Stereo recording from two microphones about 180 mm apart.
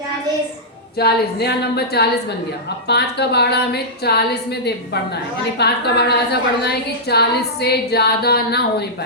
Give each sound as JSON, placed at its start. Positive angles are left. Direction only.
{"t": 0.9, "sound": "a woman's voice", "side_deg": 65}